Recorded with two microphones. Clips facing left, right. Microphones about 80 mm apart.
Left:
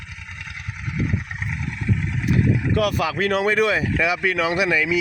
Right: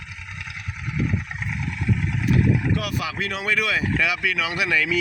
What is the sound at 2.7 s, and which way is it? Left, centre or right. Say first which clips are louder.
Speech: left 6 dB; left.